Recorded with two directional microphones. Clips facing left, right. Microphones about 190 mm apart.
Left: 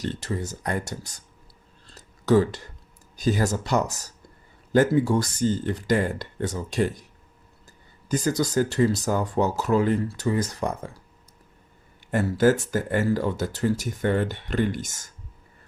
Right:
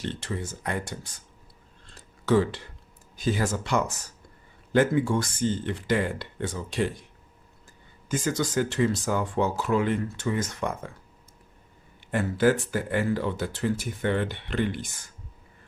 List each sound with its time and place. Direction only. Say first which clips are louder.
0.0 s speech: left 3 dB; 40° left (ahead or behind)
1.9 s a sound: left 3 dB; 40° left (ahead or behind)
3.2 s speech: left 3 dB; 40° left (ahead or behind)
8.0 s speech: left 3 dB; 40° left (ahead or behind)
12.1 s speech: left 2 dB; 40° left (ahead or behind)